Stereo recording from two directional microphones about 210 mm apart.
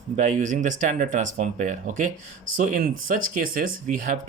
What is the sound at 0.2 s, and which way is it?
Speech, 35° right (ahead or behind).